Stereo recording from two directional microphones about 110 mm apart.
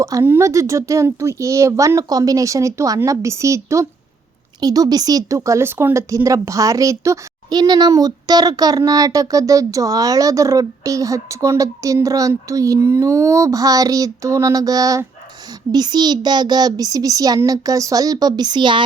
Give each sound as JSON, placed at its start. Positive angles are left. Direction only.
{"t": 0.0, "sound": "speech", "side_deg": -25}